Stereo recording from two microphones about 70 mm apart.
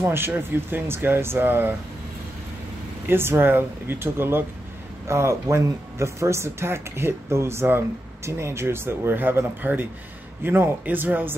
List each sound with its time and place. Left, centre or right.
0.0 s speech: right
3.1 s speech: right